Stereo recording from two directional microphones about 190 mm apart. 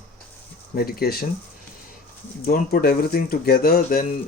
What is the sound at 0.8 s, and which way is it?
Speech, 55° left (ahead or behind).